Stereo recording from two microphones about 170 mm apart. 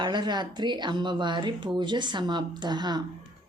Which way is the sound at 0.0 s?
25° right (ahead or behind).